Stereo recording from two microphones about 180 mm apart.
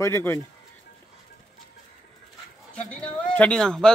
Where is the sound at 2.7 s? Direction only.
5° left (ahead or behind).